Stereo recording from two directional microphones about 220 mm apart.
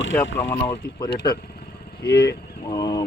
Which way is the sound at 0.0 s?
55° left (ahead or behind).